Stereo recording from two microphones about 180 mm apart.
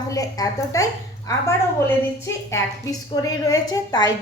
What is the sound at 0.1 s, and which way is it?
A woman's voice, 20° left (ahead or behind).